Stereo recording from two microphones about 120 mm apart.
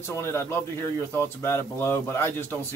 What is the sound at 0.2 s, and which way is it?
Speech, 20° left (ahead or behind).